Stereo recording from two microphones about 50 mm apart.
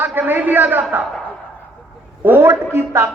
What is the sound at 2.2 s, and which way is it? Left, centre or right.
Speech, right.